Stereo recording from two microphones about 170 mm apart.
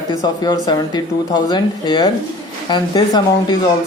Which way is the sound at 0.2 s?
25° left (ahead or behind).